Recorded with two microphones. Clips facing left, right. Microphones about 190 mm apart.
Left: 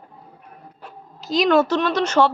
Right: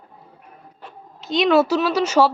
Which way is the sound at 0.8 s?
Centre (ahead or behind).